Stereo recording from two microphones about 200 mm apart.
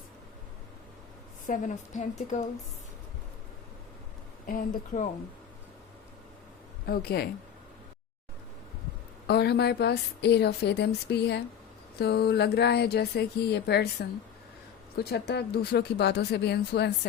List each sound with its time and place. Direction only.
1.5 s a woman's voice: 40° left (ahead or behind)
4.4 s speech: 45° left (ahead or behind)
6.8 s speech: 50° left (ahead or behind)
9.2 s a woman's voice: 55° left (ahead or behind)